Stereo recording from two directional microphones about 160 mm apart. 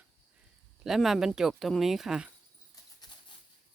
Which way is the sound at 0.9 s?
Centre (ahead or behind).